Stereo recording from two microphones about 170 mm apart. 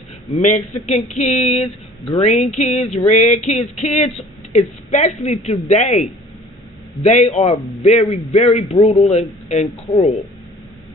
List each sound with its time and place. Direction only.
0.3 s speech: 40° left (ahead or behind)
7.1 s speech: 40° left (ahead or behind)